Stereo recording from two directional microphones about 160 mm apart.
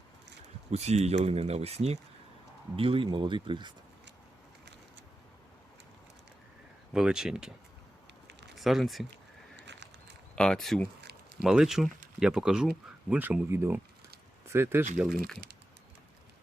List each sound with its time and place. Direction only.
0.7 s speech: 40° right (ahead or behind)
6.9 s speech: 5° right (ahead or behind)
8.5 s speech: centre (ahead or behind)
9.6 s horse: 90° right
10.3 s speech: 5° left (ahead or behind); by 14.8 s 15° right (ahead or behind)